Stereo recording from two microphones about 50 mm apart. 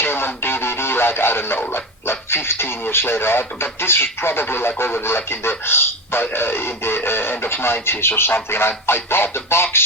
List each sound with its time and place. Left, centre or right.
0.0 s radio: left
1.7 s speech: left